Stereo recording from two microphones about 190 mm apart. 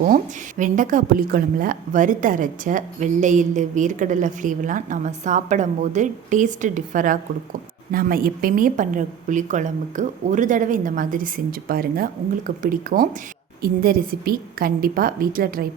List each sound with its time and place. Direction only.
0.6 s a woman's voice: 45° right (ahead or behind)